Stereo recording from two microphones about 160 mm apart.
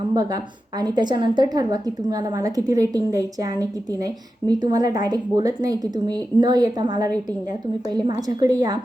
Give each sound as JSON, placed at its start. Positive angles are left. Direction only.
{"t": 0.1, "sound": "a woman's voice", "side_deg": -25}